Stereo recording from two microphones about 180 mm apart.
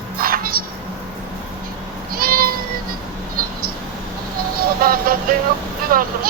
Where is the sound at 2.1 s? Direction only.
55° right (ahead or behind).